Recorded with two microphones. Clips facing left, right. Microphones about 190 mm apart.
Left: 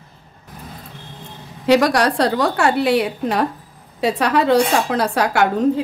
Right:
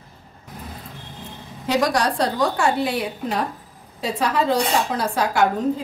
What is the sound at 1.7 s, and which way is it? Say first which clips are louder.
A woman's voice: left 6 dB; 70° left (ahead or behind).